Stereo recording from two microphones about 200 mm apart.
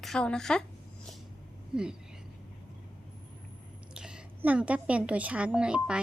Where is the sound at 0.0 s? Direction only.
5° left (ahead or behind).